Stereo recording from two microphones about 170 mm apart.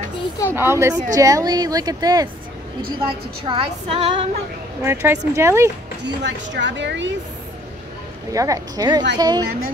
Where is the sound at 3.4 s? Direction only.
35° right (ahead or behind).